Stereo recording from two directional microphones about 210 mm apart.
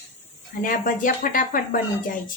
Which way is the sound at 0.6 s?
40° left (ahead or behind).